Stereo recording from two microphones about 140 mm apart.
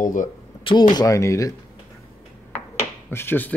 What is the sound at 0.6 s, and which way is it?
Speech, 35° left (ahead or behind).